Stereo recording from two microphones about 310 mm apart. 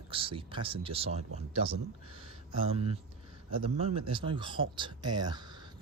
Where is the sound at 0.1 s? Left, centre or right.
Centre.